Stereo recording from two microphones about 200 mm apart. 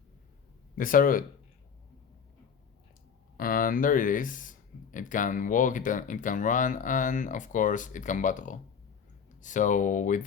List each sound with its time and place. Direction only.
0.8 s speech: 45° left (ahead or behind)
3.3 s speech: 45° left (ahead or behind)